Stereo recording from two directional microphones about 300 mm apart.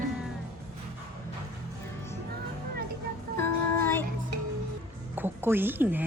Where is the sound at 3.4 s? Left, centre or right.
Centre.